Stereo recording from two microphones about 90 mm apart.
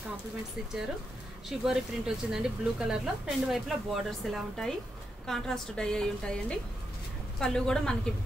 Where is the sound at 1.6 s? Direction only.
5° right (ahead or behind).